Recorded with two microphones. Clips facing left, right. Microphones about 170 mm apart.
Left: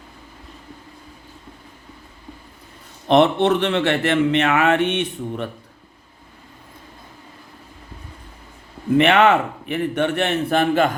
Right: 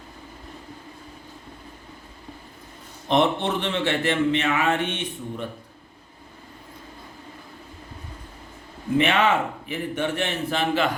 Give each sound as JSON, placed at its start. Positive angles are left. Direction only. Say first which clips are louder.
{"t": 3.1, "sound": "a man's voice", "louder": "left 6 dB", "side_deg": 70}
{"t": 9.0, "sound": "a man's voice", "louder": "left 6 dB", "side_deg": 65}